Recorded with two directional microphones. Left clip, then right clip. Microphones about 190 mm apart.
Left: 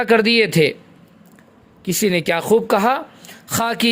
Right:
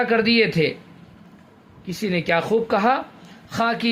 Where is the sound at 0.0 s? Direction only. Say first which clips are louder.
Left 4 dB; 45° left (ahead or behind).